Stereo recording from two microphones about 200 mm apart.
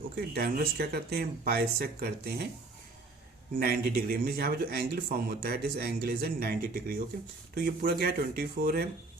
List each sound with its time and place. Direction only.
0.3 s speech: 50° right (ahead or behind)
3.6 s speech: 50° right (ahead or behind)